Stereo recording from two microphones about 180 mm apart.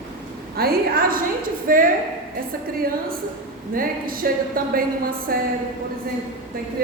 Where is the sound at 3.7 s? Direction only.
50° right (ahead or behind).